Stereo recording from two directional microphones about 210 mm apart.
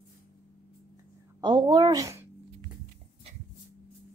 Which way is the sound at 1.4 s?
20° right (ahead or behind).